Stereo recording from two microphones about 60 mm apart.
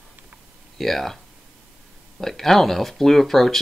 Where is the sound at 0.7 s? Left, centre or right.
Centre.